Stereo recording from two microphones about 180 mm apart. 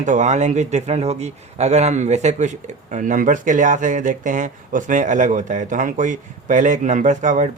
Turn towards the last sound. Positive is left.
turn(degrees=-45)  # may be behind; listen again after turning